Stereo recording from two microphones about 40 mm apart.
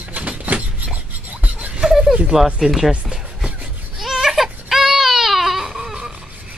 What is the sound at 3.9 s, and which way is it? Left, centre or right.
Baby cry, centre.